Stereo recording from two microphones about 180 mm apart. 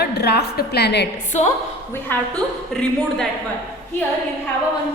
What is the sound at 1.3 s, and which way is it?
Speech, 35° left (ahead or behind).